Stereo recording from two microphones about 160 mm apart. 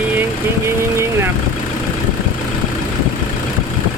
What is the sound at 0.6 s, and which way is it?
Vehicle, 15° right (ahead or behind).